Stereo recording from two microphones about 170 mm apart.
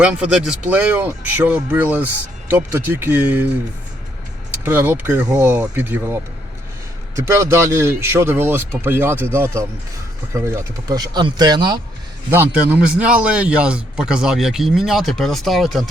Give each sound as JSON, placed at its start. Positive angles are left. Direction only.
{"t": 0.0, "sound": "speech", "side_deg": -5}
{"t": 4.6, "sound": "speech", "side_deg": -10}
{"t": 7.3, "sound": "speech", "side_deg": -15}
{"t": 12.3, "sound": "a man's voice", "side_deg": -10}